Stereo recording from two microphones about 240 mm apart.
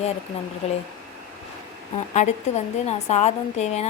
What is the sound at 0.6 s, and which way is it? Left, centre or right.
Speech, left.